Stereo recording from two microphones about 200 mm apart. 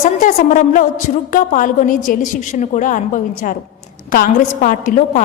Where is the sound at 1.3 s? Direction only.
40° left (ahead or behind).